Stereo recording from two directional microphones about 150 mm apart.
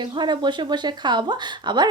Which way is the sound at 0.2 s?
30° right (ahead or behind).